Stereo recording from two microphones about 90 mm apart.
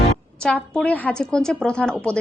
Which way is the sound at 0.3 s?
10° left (ahead or behind).